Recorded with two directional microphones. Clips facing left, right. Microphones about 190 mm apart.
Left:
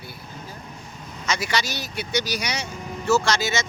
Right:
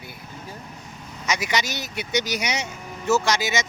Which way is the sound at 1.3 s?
15° right (ahead or behind).